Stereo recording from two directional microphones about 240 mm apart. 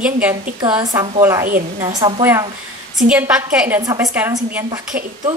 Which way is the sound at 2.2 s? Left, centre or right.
Centre.